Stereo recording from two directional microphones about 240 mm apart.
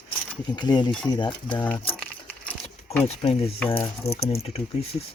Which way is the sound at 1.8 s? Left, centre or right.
Centre.